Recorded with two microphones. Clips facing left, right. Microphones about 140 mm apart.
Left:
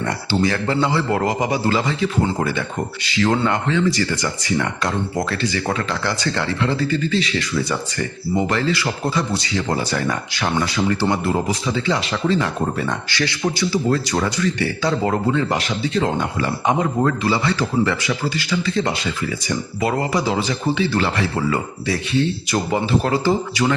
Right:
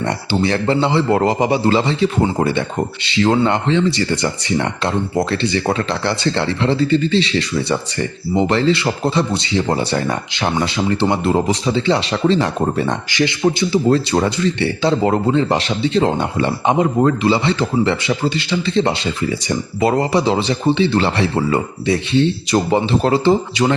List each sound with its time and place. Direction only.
0.4 s speech: 30° right (ahead or behind)
13.1 s speech: 20° right (ahead or behind)